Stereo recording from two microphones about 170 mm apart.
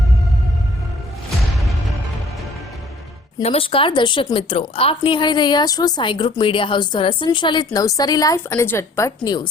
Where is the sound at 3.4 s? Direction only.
35° left (ahead or behind).